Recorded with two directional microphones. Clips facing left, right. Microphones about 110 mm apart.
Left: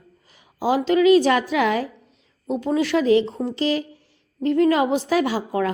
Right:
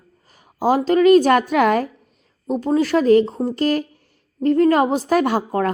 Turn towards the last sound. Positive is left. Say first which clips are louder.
# right 3 dB
turn(degrees=-50)  # may be behind; listen again after turning